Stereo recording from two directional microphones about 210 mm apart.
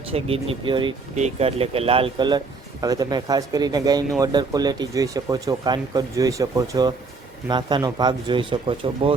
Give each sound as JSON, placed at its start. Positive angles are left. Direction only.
{"t": 0.1, "sound": "speech", "side_deg": -30}